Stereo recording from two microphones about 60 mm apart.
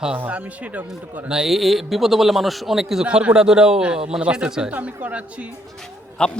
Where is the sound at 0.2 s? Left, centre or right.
Right.